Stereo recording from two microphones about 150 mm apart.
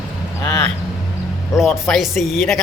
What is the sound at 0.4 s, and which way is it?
Vehicle, 15° left (ahead or behind).